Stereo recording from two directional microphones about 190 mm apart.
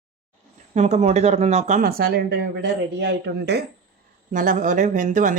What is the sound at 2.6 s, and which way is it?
A man's voice, 65° right (ahead or behind).